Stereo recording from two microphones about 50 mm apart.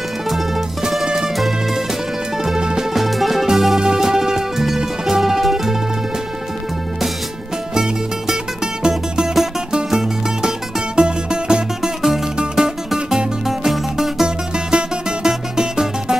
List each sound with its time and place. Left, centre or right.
0.8 s music: centre
2.4 s music: centre
2.9 s music: centre
7.7 s music: centre
14.2 s music: centre